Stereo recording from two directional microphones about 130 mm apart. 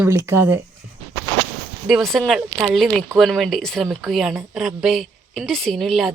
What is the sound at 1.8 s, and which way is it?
A woman's voice, centre (ahead or behind).